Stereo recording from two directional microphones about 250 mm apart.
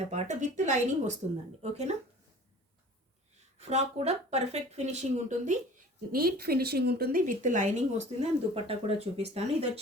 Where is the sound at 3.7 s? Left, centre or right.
Right.